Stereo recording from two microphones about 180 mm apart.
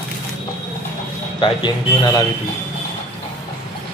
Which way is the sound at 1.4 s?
25° left (ahead or behind).